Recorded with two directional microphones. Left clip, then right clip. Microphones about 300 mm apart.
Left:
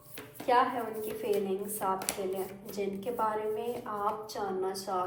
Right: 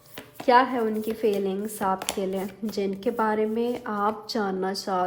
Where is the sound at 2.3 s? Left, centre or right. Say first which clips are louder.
Right 6 dB; right.